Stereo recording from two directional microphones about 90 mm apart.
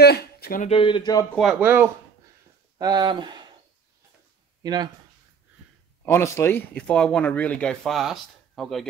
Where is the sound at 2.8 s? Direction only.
50° right (ahead or behind).